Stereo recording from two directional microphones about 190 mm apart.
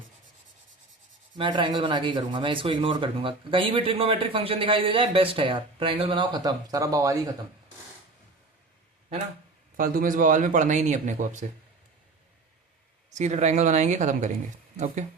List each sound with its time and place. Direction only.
1.4 s speech: 25° right (ahead or behind)
9.7 s a man's voice: 45° right (ahead or behind)
13.1 s a man's voice: 35° right (ahead or behind)